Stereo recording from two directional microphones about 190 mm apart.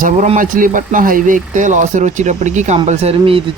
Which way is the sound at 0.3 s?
45° right (ahead or behind).